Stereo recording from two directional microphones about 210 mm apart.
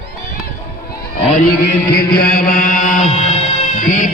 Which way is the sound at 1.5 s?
50° left (ahead or behind).